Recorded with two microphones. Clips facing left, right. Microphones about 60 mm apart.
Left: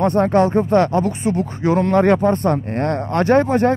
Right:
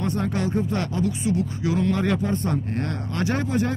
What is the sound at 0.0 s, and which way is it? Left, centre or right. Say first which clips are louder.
Speech: left 11 dB; left.